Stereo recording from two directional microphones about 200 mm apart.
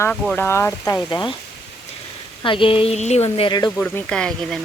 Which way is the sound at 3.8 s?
5° left (ahead or behind).